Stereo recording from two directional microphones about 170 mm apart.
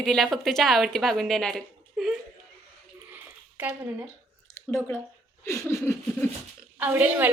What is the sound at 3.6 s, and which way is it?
Speech, 10° right (ahead or behind).